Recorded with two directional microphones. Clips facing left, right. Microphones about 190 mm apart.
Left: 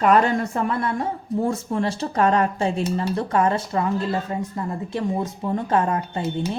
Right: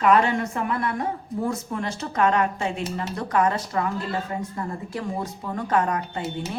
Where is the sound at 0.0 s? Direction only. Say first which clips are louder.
Left 2 dB; 40° left (ahead or behind).